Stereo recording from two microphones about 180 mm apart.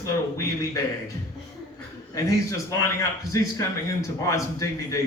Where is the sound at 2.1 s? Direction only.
20° left (ahead or behind).